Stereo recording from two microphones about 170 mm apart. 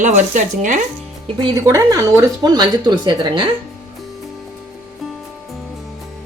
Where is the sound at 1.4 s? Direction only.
20° right (ahead or behind).